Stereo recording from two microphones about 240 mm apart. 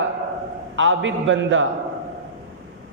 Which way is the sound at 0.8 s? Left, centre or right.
Right.